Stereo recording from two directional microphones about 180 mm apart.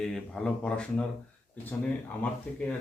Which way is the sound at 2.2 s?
10° left (ahead or behind).